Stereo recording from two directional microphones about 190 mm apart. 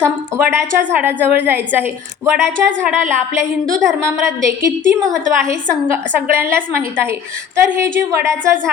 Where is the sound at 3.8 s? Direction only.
15° right (ahead or behind).